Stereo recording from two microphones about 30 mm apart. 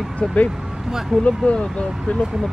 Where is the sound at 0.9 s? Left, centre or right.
Centre.